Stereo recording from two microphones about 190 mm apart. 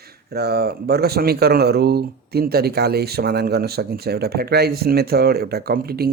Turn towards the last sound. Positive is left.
turn(degrees=-55)  # may be behind; listen again after turning